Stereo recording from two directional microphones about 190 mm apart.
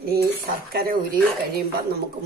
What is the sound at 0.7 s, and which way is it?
Speech, 50° right (ahead or behind).